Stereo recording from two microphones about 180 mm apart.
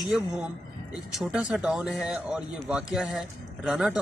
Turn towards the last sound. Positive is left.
turn(degrees=-5)  # may be behind; listen again after turning